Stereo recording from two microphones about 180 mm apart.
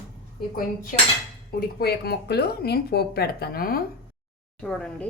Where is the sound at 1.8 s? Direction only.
60° left (ahead or behind).